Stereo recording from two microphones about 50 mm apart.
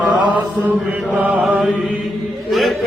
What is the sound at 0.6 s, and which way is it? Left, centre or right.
Mantra, right.